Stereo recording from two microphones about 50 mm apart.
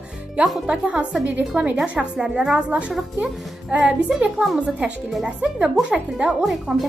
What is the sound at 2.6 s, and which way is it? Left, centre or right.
A woman's voice, right.